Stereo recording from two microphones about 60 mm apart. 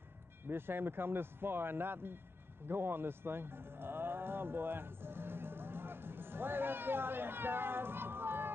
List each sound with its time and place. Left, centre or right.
0.5 s a man's voice: right